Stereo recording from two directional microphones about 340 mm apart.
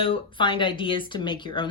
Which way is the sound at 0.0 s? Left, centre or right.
Centre.